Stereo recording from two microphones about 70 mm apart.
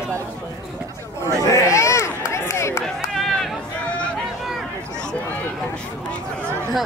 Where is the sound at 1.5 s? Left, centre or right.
Left.